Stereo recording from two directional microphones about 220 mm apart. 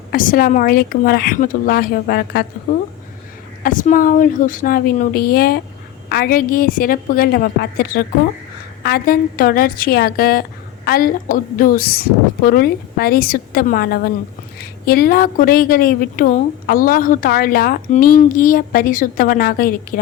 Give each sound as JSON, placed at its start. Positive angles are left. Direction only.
{"t": 0.1, "sound": "a woman's voice", "side_deg": 40}
{"t": 3.6, "sound": "a woman's voice", "side_deg": 35}